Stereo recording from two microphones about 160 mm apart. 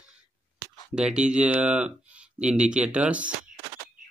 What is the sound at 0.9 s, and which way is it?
Speech, 5° right (ahead or behind).